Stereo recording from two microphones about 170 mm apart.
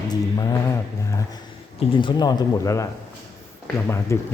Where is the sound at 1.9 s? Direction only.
30° left (ahead or behind).